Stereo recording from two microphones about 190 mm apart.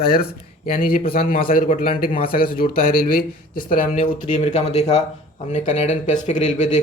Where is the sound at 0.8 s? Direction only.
50° left (ahead or behind).